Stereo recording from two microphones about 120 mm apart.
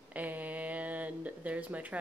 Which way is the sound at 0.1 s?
15° right (ahead or behind).